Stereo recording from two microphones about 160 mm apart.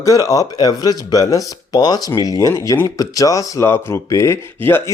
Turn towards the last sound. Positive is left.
turn(degrees=15)  # may be behind; listen again after turning